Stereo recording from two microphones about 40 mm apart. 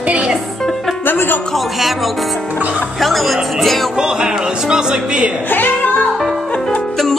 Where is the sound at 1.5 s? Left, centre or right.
Centre.